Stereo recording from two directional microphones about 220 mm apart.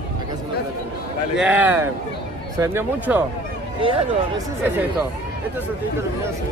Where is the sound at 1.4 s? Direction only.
5° right (ahead or behind).